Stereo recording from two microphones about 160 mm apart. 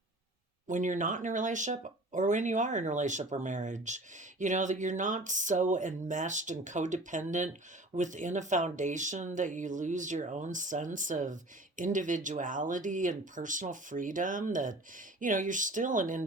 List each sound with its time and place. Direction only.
0.7 s speech: 50° right (ahead or behind)